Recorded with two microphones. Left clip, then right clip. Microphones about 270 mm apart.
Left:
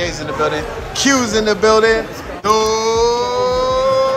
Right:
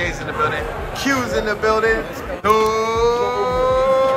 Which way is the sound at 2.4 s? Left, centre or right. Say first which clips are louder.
Left 1 dB; centre.